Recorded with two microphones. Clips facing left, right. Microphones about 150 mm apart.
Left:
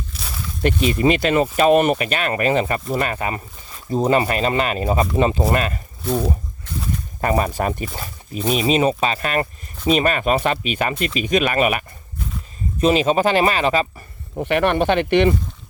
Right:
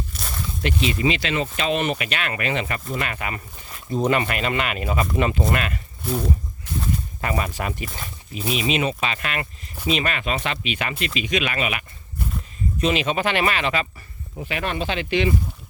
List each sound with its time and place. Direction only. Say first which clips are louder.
0.1 s snake: even; centre (ahead or behind)
0.6 s speech: left 5 dB; 50° left (ahead or behind)
7.2 s speech: left 9 dB; 40° left (ahead or behind)
14.3 s speech: left 9 dB; 60° left (ahead or behind)